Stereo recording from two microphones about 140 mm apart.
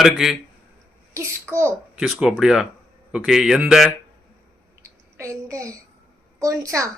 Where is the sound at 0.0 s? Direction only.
Centre (ahead or behind).